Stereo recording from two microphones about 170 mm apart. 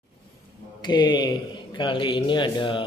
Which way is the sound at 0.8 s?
25° left (ahead or behind).